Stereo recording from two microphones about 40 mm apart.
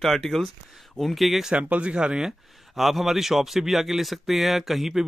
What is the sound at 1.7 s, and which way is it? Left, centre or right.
Speech, right.